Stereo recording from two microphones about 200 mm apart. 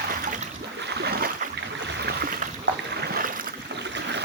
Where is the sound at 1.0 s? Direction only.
50° right (ahead or behind).